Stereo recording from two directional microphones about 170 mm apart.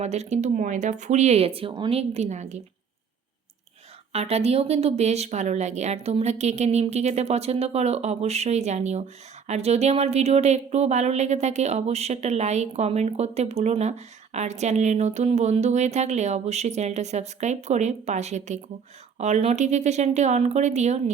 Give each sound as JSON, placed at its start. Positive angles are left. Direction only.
{"t": 0.0, "sound": "speech", "side_deg": -40}
{"t": 4.1, "sound": "speech", "side_deg": -40}